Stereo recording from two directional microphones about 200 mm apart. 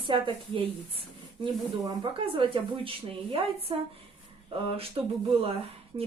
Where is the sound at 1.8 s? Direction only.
25° right (ahead or behind).